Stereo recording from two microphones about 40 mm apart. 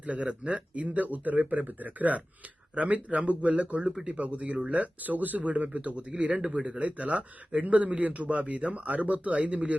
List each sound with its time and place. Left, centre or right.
0.0 s a man's voice: right
3.8 s speech: right
4.2 s a man's voice: right